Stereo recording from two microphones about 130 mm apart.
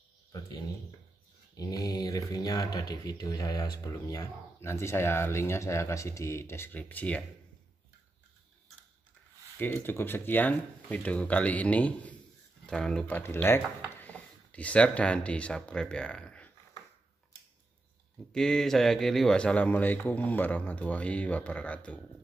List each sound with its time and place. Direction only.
1.6 s speech: 30° left (ahead or behind); by 7.2 s 10° left (ahead or behind)
9.8 s speech: 15° left (ahead or behind)
18.3 s speech: 5° left (ahead or behind)